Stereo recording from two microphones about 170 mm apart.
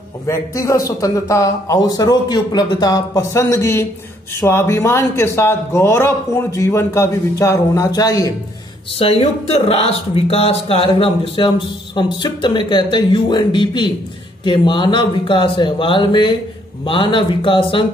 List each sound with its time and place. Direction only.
0.3 s a man's voice: 20° left (ahead or behind)
8.9 s speech: 35° left (ahead or behind)